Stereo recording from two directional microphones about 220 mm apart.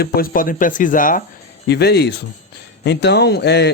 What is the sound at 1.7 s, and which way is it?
Speech, 50° left (ahead or behind).